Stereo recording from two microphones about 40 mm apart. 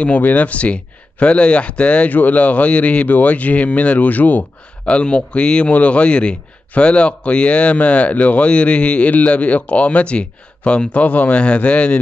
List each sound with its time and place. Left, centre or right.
0.0 s a man's voice: left
2.0 s a man's voice: left
4.8 s a man's voice: left